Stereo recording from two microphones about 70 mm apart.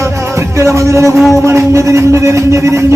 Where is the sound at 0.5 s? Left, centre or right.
Right.